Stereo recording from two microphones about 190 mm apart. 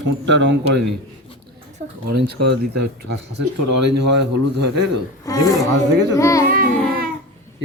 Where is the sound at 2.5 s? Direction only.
60° right (ahead or behind).